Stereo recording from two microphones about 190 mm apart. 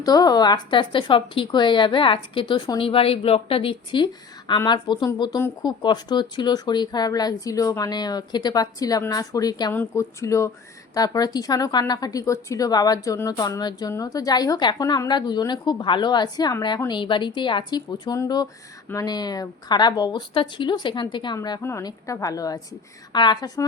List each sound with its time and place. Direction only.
0.0 s a woman's voice: 20° left (ahead or behind)